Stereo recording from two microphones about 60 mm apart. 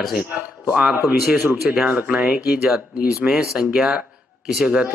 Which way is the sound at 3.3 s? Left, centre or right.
Centre.